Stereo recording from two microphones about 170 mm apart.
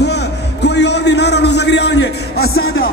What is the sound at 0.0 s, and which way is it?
Music, 85° left.